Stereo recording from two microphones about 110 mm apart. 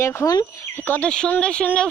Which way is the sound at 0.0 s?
25° left (ahead or behind).